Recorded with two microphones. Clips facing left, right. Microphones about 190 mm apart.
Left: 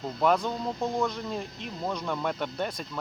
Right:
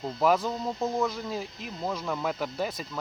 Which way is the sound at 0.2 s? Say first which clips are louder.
Even; 5° right (ahead or behind).